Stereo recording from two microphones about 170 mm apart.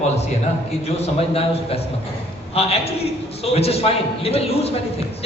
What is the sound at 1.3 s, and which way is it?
A man's voice, 35° left (ahead or behind).